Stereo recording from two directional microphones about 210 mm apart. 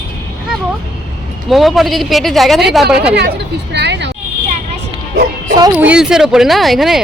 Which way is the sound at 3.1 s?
50° right (ahead or behind).